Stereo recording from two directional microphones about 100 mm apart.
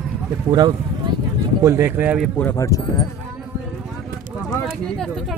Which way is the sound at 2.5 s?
30° left (ahead or behind).